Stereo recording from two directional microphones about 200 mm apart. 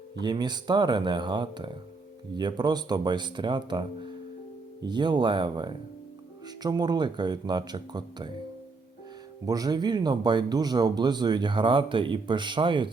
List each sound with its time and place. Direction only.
0.2 s speech: 20° right (ahead or behind)
9.5 s speech: 20° right (ahead or behind)